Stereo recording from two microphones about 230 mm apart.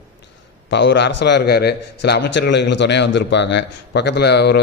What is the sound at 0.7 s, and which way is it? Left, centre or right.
A man's voice, left.